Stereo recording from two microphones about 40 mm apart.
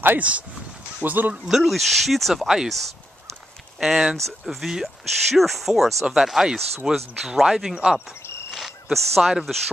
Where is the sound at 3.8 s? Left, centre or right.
Centre.